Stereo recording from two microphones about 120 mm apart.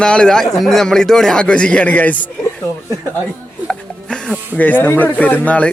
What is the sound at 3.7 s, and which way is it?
Speech, 10° left (ahead or behind).